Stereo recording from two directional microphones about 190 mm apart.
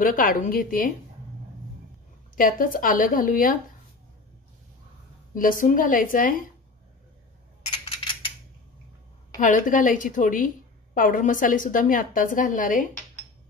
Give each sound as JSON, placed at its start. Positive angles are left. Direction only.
{"t": 0.0, "sound": "a woman's voice", "side_deg": 45}
{"t": 2.3, "sound": "a woman's voice", "side_deg": 45}
{"t": 5.3, "sound": "a woman's voice", "side_deg": 45}
{"t": 9.4, "sound": "a woman's voice", "side_deg": 45}